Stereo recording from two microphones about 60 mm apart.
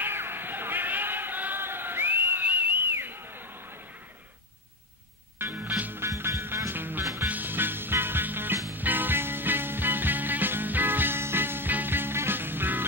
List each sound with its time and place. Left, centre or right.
0.0 s a sound: right
5.4 s music: right
6.0 s music: right